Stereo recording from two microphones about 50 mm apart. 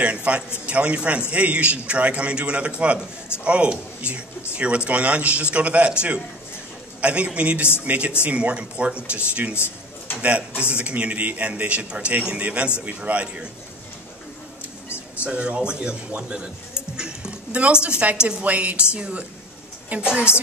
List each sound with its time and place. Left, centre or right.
0.0 s a man's voice: right
15.2 s a man's voice: right
16.2 s a sound: centre
17.8 s a man's voice: right